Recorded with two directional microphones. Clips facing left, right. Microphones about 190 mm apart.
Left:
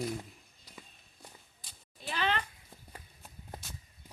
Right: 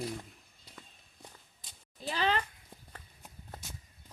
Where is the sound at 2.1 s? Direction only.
35° right (ahead or behind).